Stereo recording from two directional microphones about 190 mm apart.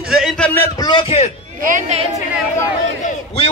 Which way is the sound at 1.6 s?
40° right (ahead or behind).